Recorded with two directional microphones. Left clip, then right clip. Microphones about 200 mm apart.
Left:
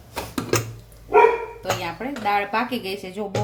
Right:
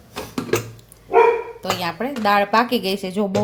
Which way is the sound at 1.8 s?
45° right (ahead or behind).